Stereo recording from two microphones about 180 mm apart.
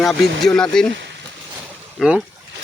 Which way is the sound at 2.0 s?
5° right (ahead or behind).